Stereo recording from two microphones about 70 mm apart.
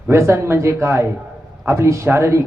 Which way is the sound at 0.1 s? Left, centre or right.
Right.